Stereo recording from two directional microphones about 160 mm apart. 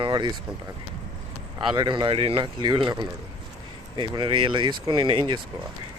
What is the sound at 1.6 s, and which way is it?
Speech, 30° right (ahead or behind).